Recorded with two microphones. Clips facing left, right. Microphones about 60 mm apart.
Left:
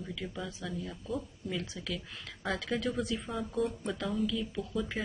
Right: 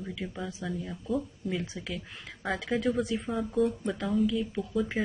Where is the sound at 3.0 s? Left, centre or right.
Right.